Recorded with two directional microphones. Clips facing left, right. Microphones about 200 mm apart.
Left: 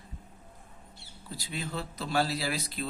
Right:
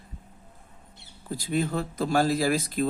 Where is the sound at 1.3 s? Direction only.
45° right (ahead or behind).